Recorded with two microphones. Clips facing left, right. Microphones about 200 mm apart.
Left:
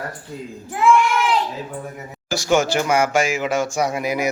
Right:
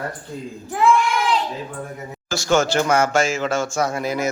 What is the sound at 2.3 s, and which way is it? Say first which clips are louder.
Speech: even; 15° left (ahead or behind).